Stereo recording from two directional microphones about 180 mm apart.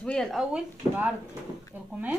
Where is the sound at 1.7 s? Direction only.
10° right (ahead or behind).